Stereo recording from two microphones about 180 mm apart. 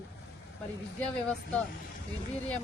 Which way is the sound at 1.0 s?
5° left (ahead or behind).